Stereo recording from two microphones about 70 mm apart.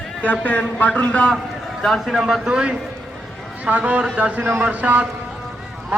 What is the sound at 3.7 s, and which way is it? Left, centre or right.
A man's voice, right.